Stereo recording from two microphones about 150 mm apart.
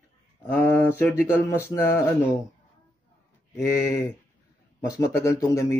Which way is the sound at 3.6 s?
20° left (ahead or behind).